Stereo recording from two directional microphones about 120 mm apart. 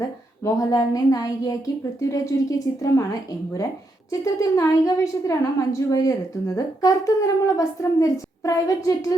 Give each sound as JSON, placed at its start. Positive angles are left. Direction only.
{"t": 0.4, "sound": "a woman's voice", "side_deg": 30}